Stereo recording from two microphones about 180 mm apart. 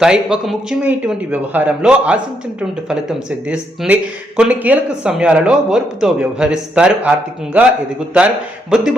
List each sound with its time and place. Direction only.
0.0 s a man's voice: 5° right (ahead or behind)
8.7 s a man's voice: 5° right (ahead or behind)